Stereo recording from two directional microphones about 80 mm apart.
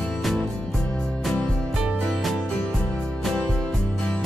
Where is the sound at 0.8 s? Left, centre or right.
Centre.